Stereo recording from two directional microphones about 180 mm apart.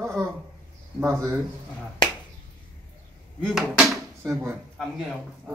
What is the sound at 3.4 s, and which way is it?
Speech, centre (ahead or behind).